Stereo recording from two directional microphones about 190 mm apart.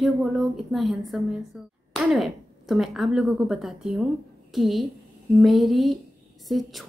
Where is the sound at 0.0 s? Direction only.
Centre (ahead or behind).